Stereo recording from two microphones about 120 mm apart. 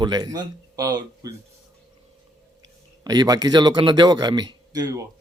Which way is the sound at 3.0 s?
35° right (ahead or behind).